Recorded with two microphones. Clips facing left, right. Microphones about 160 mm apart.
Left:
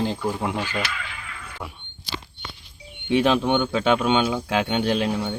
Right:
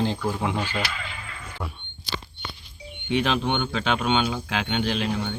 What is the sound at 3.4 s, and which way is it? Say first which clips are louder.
Speech: left 5 dB; 45° left (ahead or behind).